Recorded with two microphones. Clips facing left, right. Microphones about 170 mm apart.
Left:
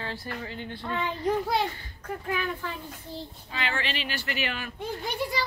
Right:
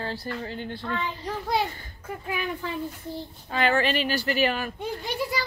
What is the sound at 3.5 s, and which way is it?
Speech, 50° right (ahead or behind).